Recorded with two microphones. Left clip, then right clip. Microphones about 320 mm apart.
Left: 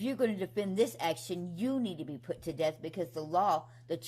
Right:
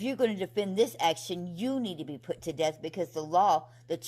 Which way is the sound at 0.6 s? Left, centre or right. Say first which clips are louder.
Right 5 dB; centre.